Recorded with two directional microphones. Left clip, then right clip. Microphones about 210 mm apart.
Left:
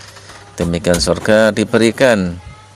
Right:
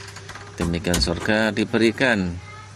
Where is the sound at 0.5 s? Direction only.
40° left (ahead or behind).